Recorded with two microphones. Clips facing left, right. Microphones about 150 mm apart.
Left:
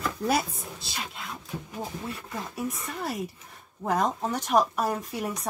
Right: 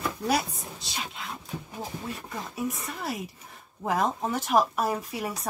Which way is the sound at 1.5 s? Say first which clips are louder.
Left 1 dB; 10° right (ahead or behind).